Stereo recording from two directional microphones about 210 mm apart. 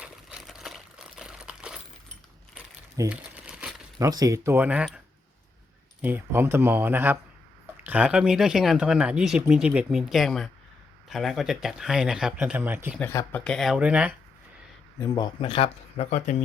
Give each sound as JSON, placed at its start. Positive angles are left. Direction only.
{"t": 0.0, "sound": "crumpling", "side_deg": -5}
{"t": 3.9, "sound": "speech", "side_deg": -20}
{"t": 6.0, "sound": "speech", "side_deg": -10}
{"t": 13.0, "sound": "speech", "side_deg": 10}
{"t": 15.0, "sound": "speech", "side_deg": 15}